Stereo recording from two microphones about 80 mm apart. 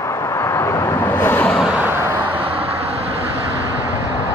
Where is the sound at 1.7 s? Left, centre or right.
Right.